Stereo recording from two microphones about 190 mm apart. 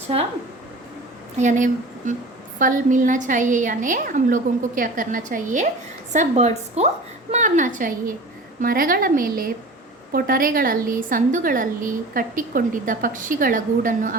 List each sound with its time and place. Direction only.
1.4 s a woman's voice: 40° right (ahead or behind)